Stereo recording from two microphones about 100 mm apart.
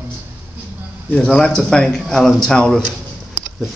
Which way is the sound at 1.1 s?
10° left (ahead or behind).